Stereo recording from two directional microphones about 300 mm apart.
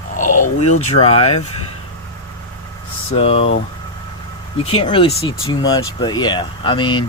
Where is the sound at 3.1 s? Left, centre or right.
Centre.